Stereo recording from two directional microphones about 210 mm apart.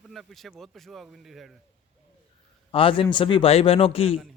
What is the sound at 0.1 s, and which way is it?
Speech, centre (ahead or behind).